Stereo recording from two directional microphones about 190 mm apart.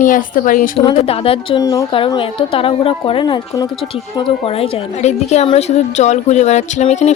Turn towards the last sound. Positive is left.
turn(degrees=35)  # may be behind; listen again after turning